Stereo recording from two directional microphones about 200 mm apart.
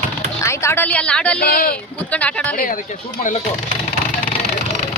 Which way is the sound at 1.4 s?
50° left (ahead or behind).